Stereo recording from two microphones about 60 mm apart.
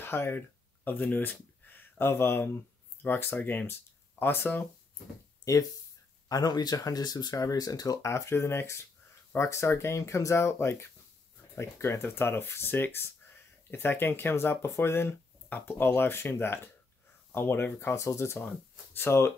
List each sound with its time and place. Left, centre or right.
0.0 s speech: left
5.4 s speech: left
6.2 s speech: left
17.7 s speech: left